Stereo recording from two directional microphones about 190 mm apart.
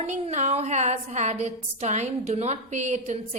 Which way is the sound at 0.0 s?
35° right (ahead or behind).